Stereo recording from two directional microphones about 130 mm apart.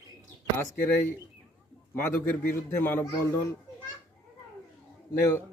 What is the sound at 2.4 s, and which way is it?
Speech, 15° left (ahead or behind).